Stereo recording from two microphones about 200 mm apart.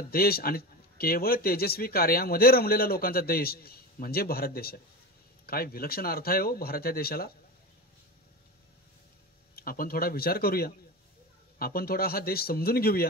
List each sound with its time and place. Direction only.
0.1 s speech: 50° left (ahead or behind)
9.6 s speech: 45° left (ahead or behind)